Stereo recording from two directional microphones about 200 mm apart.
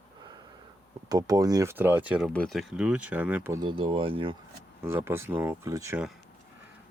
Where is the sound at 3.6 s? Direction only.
25° right (ahead or behind).